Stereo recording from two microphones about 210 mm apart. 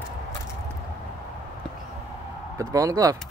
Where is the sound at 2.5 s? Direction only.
15° right (ahead or behind).